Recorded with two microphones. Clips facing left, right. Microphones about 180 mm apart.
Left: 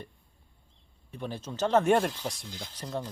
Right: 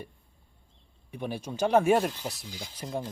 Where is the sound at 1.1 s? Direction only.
10° right (ahead or behind).